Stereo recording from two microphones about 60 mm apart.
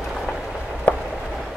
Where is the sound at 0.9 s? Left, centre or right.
Left.